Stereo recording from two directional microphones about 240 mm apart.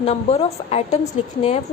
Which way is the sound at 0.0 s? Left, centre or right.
Left.